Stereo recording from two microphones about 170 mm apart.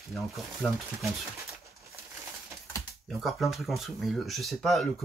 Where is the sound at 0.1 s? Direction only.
Centre (ahead or behind).